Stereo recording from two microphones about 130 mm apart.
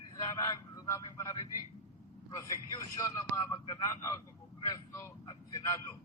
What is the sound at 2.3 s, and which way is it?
Speech, 25° left (ahead or behind).